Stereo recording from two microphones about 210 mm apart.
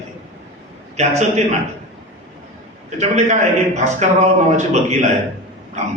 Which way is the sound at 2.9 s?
35° right (ahead or behind).